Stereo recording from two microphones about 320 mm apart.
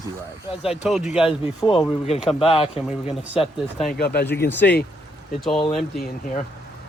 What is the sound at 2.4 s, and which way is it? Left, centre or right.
Speech, centre.